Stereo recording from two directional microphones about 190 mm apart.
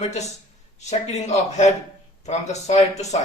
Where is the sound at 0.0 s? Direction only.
35° left (ahead or behind).